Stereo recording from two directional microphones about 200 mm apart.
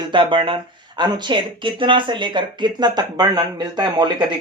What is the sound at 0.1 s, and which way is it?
Speech, 25° right (ahead or behind).